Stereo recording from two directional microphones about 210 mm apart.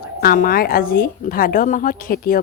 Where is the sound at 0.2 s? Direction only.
45° left (ahead or behind).